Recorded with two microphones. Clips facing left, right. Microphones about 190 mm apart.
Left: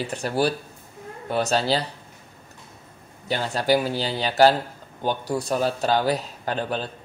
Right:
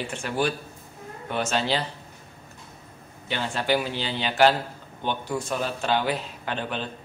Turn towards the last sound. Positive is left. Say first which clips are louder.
# left 3 dB
turn(degrees=40)  # may be behind; listen again after turning